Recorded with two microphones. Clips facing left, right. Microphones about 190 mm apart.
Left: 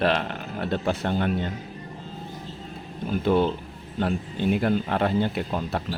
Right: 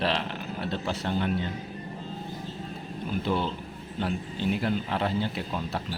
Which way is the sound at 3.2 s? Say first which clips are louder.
Left 9 dB; 50° left (ahead or behind).